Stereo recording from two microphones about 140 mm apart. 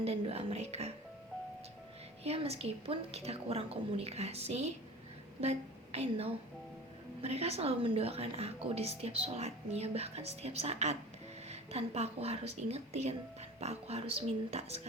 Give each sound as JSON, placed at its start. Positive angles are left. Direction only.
{"t": 0.0, "sound": "a woman's voice", "side_deg": -45}
{"t": 2.2, "sound": "a woman's voice", "side_deg": -45}